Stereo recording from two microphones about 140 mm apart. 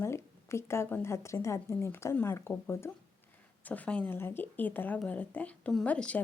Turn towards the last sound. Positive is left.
turn(degrees=10)  # may be behind; listen again after turning